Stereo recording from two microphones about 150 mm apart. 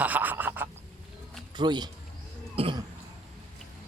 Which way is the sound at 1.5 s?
30° right (ahead or behind).